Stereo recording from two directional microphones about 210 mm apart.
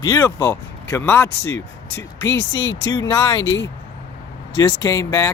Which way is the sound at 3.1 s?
15° left (ahead or behind).